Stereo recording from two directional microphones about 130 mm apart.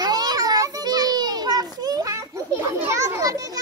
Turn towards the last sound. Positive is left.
turn(degrees=-25)  # may be behind; listen again after turning